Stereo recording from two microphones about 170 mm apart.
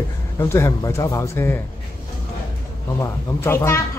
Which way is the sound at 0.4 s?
15° left (ahead or behind).